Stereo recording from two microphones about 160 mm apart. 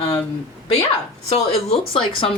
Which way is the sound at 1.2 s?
40° left (ahead or behind).